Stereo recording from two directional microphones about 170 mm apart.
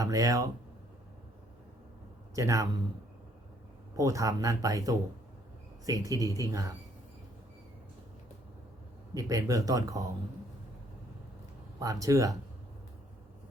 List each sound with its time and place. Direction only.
0.0 s speech: 20° right (ahead or behind)
2.3 s speech: 20° right (ahead or behind)
3.9 s speech: 20° right (ahead or behind)
9.1 s speech: 20° right (ahead or behind)
11.8 s speech: 20° right (ahead or behind)